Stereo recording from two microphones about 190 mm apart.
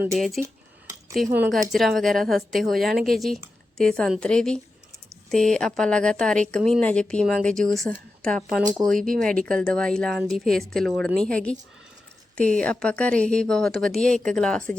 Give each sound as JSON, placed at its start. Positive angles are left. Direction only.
{"t": 0.4, "sound": "speech", "side_deg": -45}
{"t": 1.4, "sound": "a woman's voice", "side_deg": 0}
{"t": 9.0, "sound": "speech", "side_deg": -45}
{"t": 9.2, "sound": "a woman's voice", "side_deg": 5}